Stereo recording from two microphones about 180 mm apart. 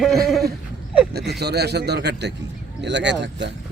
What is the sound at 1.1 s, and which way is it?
Speech, 65° right (ahead or behind).